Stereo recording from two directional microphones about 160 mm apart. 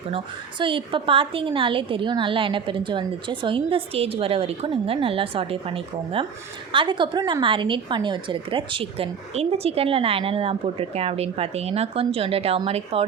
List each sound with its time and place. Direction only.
0.6 s a woman's voice: 30° right (ahead or behind)